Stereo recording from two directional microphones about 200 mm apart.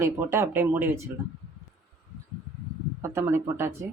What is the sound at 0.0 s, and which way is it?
Speech, 10° right (ahead or behind).